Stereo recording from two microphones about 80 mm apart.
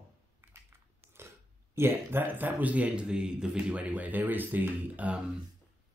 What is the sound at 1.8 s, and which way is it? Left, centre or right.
Speech, right.